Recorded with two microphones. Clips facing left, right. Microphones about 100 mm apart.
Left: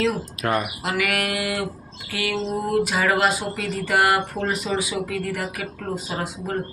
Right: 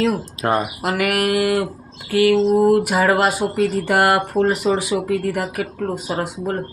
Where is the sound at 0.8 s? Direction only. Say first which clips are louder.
Right 5 dB; 50° right (ahead or behind).